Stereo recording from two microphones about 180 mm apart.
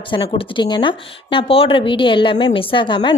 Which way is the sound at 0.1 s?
25° left (ahead or behind).